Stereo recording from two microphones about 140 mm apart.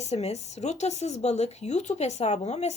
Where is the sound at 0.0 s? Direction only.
50° left (ahead or behind).